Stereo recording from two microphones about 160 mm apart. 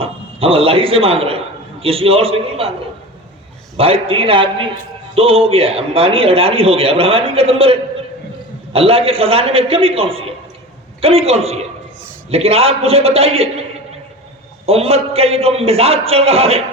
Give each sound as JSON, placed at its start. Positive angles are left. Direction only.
{"t": 0.0, "sound": "a man's voice", "side_deg": -35}
{"t": 3.8, "sound": "a man's voice", "side_deg": -35}
{"t": 14.7, "sound": "a man's voice", "side_deg": -40}